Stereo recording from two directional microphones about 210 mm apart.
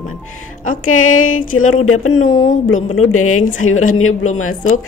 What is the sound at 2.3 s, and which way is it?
Speech, 35° left (ahead or behind).